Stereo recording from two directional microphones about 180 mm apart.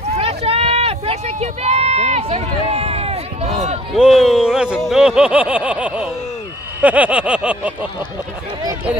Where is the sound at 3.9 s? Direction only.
Centre (ahead or behind).